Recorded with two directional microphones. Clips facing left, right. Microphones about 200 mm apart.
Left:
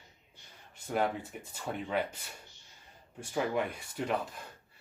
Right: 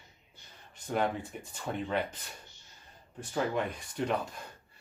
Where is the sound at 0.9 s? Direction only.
5° left (ahead or behind).